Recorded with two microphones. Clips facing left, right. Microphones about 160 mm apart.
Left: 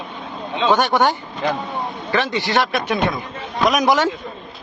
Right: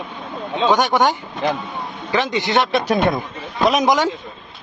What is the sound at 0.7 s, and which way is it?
A man's voice, 15° right (ahead or behind).